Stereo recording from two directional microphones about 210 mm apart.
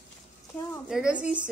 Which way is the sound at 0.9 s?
5° right (ahead or behind).